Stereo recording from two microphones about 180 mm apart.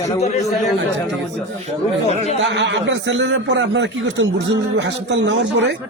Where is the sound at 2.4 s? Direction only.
80° right.